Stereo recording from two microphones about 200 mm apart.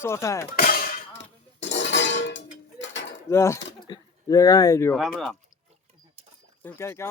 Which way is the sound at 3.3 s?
15° left (ahead or behind).